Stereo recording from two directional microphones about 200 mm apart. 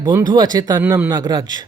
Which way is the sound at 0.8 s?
10° right (ahead or behind).